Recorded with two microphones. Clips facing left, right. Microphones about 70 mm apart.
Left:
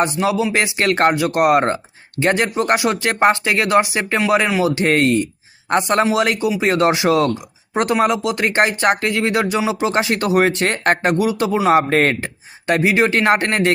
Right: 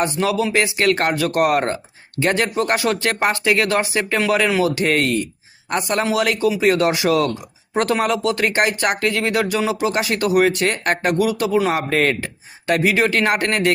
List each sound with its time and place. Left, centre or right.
0.0 s speech: left
11.7 s speech: left